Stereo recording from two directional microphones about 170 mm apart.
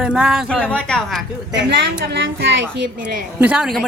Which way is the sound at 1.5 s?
90° right.